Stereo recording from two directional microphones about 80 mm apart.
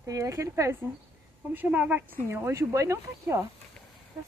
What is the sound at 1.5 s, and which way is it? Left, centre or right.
Speech, right.